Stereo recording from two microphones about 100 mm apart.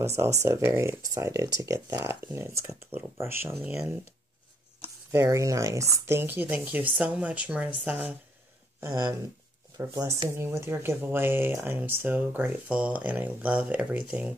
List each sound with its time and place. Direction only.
0.0 s speech: 25° right (ahead or behind)
4.8 s speech: 30° right (ahead or behind)
8.8 s speech: 30° right (ahead or behind); by 14.3 s 15° right (ahead or behind)